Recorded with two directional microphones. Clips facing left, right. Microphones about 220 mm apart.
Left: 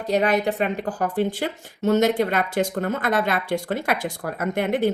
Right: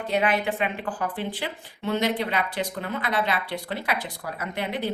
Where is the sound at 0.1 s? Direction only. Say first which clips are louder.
Left 4 dB; 40° left (ahead or behind).